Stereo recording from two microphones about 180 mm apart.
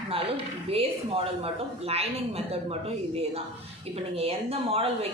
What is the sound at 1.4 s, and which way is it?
A woman's voice, 35° right (ahead or behind).